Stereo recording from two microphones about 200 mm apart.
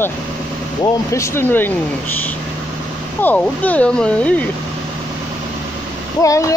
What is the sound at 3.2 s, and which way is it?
Speech, 10° left (ahead or behind).